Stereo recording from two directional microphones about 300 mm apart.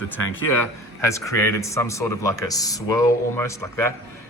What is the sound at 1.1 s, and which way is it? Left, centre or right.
A man's voice, centre.